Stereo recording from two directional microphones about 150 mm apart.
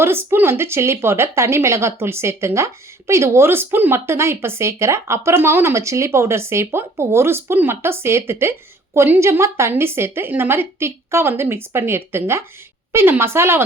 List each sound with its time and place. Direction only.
0.0 s speech: 15° right (ahead or behind)